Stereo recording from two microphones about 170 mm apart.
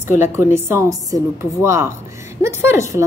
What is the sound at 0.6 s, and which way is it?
A woman's voice, 20° right (ahead or behind).